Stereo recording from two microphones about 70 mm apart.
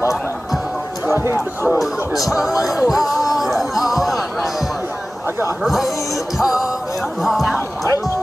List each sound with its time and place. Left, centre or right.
1.1 s speech: right
1.8 s speech: centre
2.6 s music: centre
5.6 s speech: centre
6.3 s music: centre
7.2 s speech: centre
7.5 s music: left